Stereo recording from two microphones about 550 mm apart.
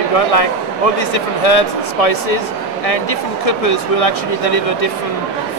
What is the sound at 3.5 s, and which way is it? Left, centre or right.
Speech, left.